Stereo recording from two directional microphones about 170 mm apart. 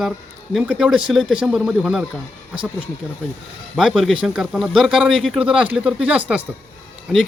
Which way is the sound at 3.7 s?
Centre (ahead or behind).